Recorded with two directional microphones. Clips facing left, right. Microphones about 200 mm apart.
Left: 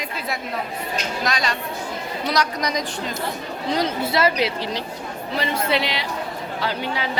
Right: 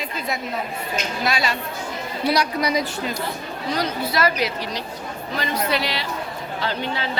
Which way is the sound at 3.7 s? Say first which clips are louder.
Left 2 dB; 25° left (ahead or behind).